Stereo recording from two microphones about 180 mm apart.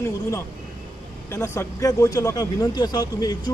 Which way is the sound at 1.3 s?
15° left (ahead or behind).